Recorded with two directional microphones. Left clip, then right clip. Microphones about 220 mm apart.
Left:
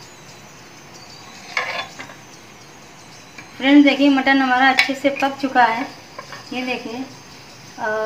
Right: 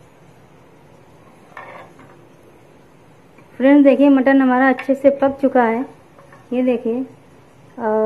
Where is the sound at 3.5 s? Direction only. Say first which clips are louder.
Right 2 dB; 35° right (ahead or behind).